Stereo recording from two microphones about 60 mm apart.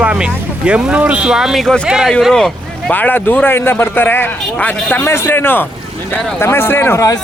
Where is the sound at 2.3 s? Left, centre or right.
Centre.